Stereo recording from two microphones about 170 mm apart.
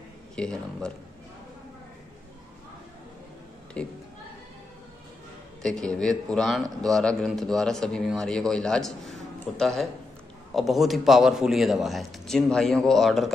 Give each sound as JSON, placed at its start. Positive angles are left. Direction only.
{"t": 0.4, "sound": "a man's voice", "side_deg": 5}
{"t": 3.8, "sound": "speech", "side_deg": 5}
{"t": 5.6, "sound": "a man's voice", "side_deg": 5}